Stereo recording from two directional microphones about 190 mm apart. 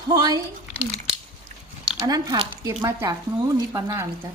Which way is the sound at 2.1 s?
20° right (ahead or behind).